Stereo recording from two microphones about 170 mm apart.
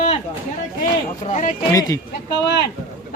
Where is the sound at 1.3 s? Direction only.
50° left (ahead or behind).